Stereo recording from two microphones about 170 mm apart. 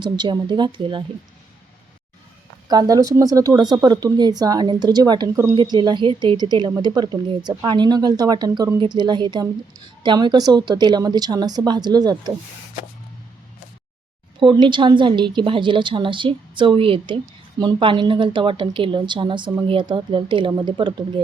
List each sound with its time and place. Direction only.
0.0 s speech: 25° right (ahead or behind)
2.6 s speech: 20° right (ahead or behind)
14.3 s speech: 30° right (ahead or behind)